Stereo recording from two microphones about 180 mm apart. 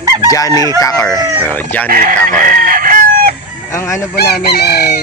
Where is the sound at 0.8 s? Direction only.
20° left (ahead or behind).